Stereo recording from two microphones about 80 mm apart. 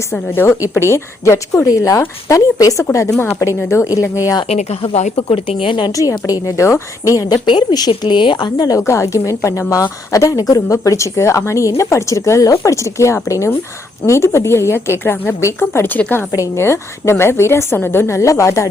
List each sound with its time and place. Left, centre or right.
0.1 s a woman's voice: left
5.6 s a woman's voice: left
6.0 s a woman's voice: left
7.4 s a woman's voice: left
8.9 s a woman's voice: left
16.3 s a woman's voice: left